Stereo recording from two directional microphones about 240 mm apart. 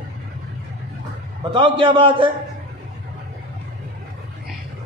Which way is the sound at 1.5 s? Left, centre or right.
Right.